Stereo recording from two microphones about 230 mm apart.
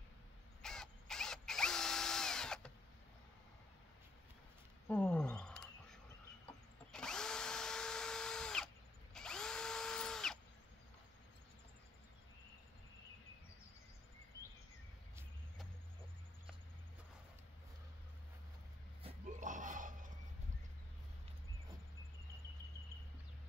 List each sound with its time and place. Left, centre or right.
0.6 s drill: centre
4.8 s wild animals: centre
6.9 s drill: centre
19.0 s a sound: right